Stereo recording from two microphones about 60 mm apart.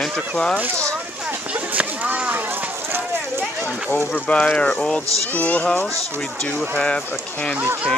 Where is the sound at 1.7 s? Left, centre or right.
Right.